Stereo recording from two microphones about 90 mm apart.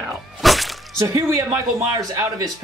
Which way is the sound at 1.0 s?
35° right (ahead or behind).